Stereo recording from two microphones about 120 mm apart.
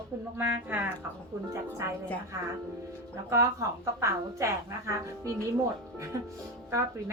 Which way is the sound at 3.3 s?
25° right (ahead or behind).